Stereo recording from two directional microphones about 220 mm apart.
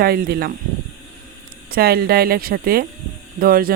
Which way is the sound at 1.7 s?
45° right (ahead or behind).